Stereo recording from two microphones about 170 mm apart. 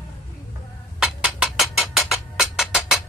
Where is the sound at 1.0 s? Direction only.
Centre (ahead or behind).